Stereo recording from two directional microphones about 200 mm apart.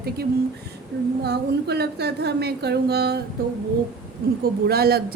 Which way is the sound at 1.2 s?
55° right (ahead or behind).